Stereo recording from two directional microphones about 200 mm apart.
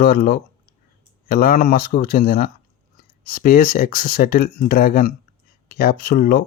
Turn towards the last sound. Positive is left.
turn(degrees=45)  # may be behind; listen again after turning